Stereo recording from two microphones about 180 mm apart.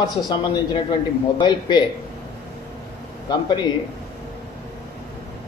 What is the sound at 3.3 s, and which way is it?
Speech, 25° left (ahead or behind).